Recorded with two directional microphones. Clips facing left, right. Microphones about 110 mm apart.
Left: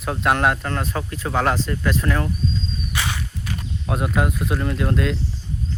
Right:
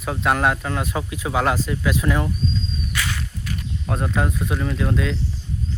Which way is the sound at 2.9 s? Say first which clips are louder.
Left 1 dB; 20° left (ahead or behind).